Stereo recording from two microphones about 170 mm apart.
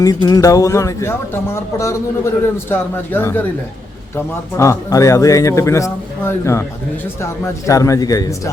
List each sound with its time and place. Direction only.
0.0 s speech: 25° left (ahead or behind)
4.5 s speech: 15° left (ahead or behind)
7.7 s a man's voice: 20° left (ahead or behind)